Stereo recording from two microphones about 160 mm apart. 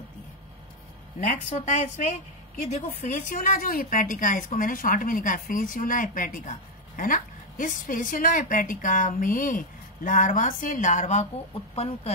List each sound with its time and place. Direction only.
1.2 s a woman's voice: 50° left (ahead or behind)